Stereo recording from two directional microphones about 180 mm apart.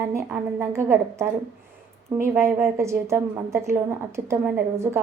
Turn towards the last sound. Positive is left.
turn(degrees=-15)  # may be behind; listen again after turning